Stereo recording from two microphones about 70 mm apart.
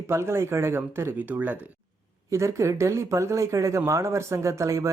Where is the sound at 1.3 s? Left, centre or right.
Right.